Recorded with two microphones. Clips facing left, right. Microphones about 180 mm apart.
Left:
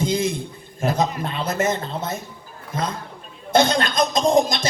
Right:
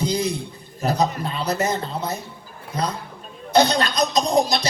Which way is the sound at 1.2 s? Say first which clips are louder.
Even; 50° left (ahead or behind).